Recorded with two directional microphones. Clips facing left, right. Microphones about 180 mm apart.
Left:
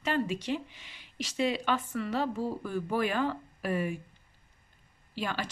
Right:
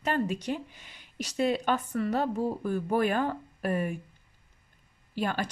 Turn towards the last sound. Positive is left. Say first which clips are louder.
# right 4 dB
turn(degrees=-50)  # may be behind; listen again after turning